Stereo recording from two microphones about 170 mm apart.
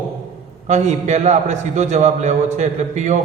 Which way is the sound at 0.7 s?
40° right (ahead or behind).